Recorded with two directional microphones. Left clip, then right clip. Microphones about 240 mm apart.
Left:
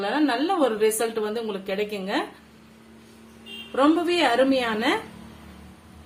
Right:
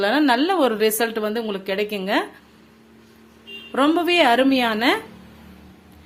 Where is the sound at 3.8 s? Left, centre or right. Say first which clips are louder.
Right 3 dB; right.